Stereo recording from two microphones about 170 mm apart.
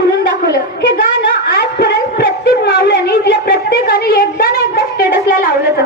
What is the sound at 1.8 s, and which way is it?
A woman's voice, 75° left (ahead or behind).